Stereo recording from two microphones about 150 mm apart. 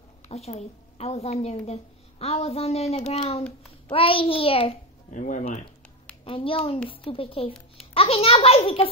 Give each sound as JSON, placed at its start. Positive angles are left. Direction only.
{"t": 0.3, "sound": "a woman's voice", "side_deg": 45}
{"t": 5.1, "sound": "speech", "side_deg": 60}
{"t": 6.2, "sound": "speech", "side_deg": 35}